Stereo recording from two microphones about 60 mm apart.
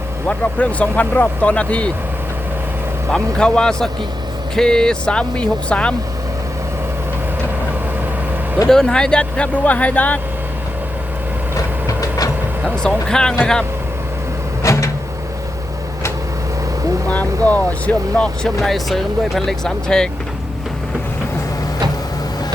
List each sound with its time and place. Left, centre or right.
0.3 s speech: left
3.1 s speech: centre
8.6 s speech: centre; by 10.2 s left
11.9 s train: left
13.1 s speech: centre
14.6 s cupboard open or close: left
17.1 s speech: left
18.4 s speech: centre